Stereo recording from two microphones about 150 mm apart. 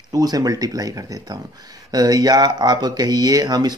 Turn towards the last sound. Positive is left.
turn(degrees=-25)  # may be behind; listen again after turning